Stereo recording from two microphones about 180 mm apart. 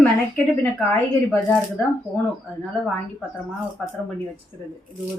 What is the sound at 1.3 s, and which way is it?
Speech, 10° left (ahead or behind).